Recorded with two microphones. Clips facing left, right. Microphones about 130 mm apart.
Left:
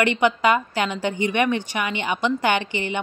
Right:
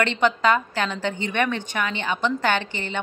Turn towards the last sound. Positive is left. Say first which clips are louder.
# left 2 dB
turn(degrees=15)  # may be behind; listen again after turning